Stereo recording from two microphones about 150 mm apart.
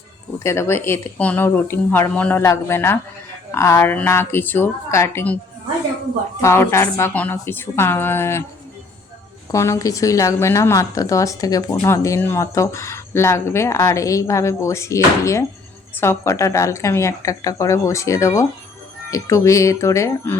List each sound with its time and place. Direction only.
0.3 s a woman's voice: 20° left (ahead or behind)
6.4 s a woman's voice: 15° left (ahead or behind)
9.5 s speech: 20° left (ahead or behind)